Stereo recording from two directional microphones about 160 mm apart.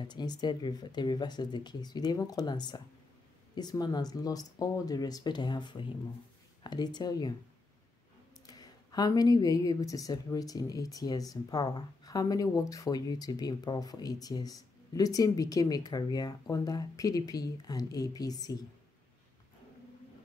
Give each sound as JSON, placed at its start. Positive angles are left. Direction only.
{"t": 0.0, "sound": "a woman's voice", "side_deg": 25}
{"t": 8.5, "sound": "a woman's voice", "side_deg": 25}